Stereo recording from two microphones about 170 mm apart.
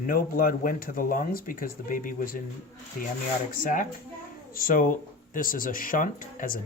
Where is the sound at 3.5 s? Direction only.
50° left (ahead or behind).